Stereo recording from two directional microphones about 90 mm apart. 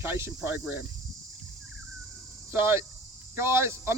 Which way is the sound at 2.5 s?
25° right (ahead or behind).